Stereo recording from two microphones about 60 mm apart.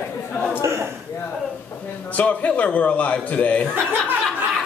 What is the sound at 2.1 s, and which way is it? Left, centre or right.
Speech, left.